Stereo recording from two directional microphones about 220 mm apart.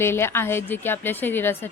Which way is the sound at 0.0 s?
10° left (ahead or behind).